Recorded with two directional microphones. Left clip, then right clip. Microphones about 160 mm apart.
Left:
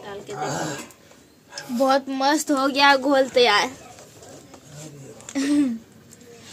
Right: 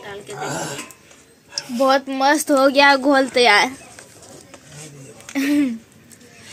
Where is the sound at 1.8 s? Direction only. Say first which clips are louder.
Right 3 dB; 20° right (ahead or behind).